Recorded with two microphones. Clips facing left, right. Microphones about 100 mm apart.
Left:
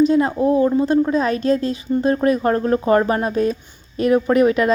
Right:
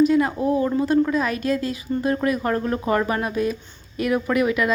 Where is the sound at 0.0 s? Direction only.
25° left (ahead or behind).